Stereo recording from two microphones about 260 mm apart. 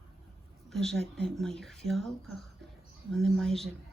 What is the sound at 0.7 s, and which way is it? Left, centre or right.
Speech, centre.